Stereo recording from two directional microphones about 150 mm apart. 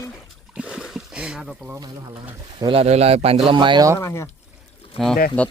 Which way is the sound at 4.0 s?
15° left (ahead or behind).